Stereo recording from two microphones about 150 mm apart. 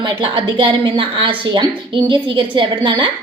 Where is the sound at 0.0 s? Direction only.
35° right (ahead or behind).